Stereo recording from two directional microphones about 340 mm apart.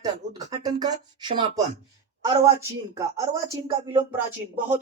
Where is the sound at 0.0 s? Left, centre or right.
Centre.